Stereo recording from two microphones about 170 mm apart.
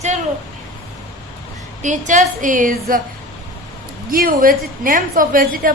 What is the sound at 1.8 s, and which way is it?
A woman's voice, 45° right (ahead or behind).